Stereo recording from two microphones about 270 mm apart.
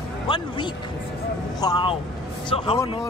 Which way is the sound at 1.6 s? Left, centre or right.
Centre.